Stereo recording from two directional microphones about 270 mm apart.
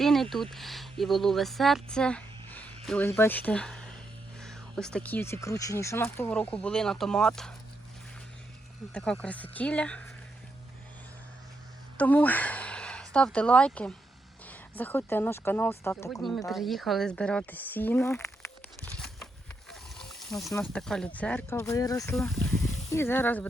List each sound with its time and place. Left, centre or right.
0.0 s a sound: centre
0.5 s speech: centre
8.9 s speech: centre
11.9 s speech: centre
20.5 s speech: centre
22.1 s speech: centre